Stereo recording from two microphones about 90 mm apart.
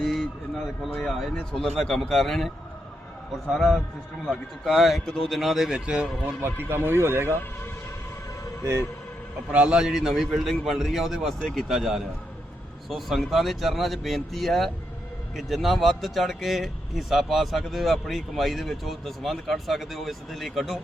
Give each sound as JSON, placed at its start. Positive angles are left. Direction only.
{"t": 0.0, "sound": "a sound", "side_deg": 5}
{"t": 0.9, "sound": "speech", "side_deg": 5}
{"t": 6.4, "sound": "speech", "side_deg": -25}
{"t": 9.5, "sound": "speech", "side_deg": -10}